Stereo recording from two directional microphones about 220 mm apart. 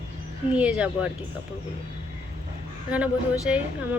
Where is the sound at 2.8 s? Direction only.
5° right (ahead or behind).